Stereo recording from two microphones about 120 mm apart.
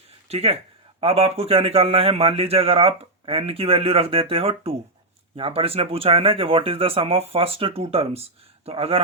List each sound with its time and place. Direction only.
0.3 s a man's voice: 55° right (ahead or behind)